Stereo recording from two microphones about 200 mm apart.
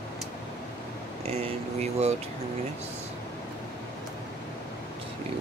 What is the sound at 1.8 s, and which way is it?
Speech, 35° right (ahead or behind).